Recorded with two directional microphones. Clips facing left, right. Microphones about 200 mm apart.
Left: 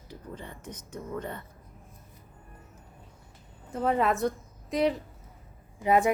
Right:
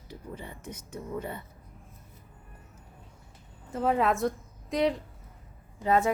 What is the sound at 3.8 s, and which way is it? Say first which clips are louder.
A woman's voice: even; centre (ahead or behind).